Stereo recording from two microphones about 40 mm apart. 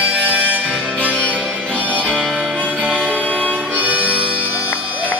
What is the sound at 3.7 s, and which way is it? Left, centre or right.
Harmonica, right.